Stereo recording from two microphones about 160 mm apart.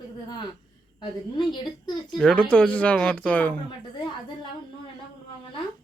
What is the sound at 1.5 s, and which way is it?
Speech, 30° left (ahead or behind).